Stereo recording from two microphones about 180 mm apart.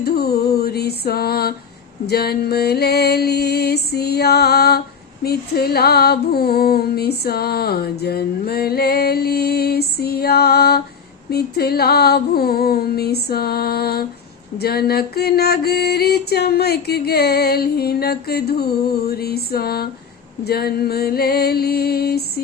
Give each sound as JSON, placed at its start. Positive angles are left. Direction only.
{"t": 0.0, "sound": "music", "side_deg": 60}